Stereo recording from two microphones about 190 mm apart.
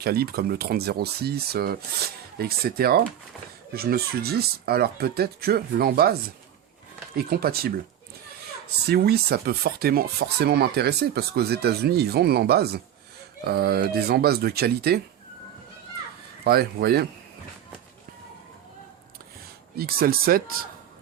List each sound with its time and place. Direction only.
0.0 s speech: 55° right (ahead or behind)
7.2 s speech: 50° right (ahead or behind)
8.9 s speech: 55° right (ahead or behind)
16.4 s speech: 55° right (ahead or behind)
19.7 s speech: 55° right (ahead or behind)